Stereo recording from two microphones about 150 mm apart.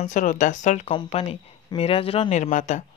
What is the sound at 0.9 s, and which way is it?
Speech, 40° left (ahead or behind).